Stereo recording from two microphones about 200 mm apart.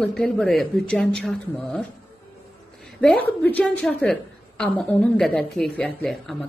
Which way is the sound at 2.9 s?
5° left (ahead or behind).